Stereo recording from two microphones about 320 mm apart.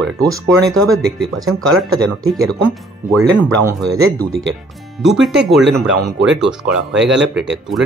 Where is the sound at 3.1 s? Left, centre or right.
Centre.